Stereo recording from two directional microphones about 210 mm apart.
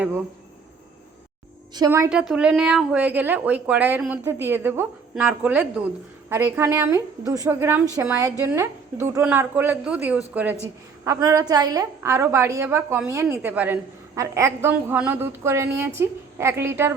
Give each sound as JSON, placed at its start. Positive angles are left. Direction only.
{"t": 1.7, "sound": "a woman's voice", "side_deg": -15}
{"t": 2.0, "sound": "a woman's voice", "side_deg": -5}